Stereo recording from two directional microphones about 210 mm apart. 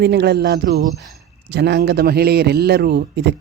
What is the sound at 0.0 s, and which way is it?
Speech, 50° right (ahead or behind).